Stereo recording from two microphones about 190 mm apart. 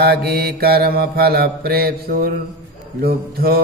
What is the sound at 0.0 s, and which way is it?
Mantra, 55° right (ahead or behind).